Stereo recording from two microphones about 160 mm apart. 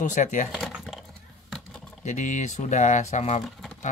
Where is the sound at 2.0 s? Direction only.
50° left (ahead or behind).